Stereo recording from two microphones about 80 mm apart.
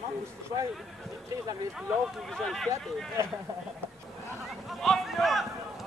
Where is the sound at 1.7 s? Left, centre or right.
Centre.